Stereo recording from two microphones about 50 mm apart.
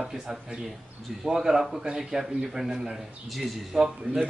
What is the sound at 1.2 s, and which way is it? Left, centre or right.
A man's voice, centre.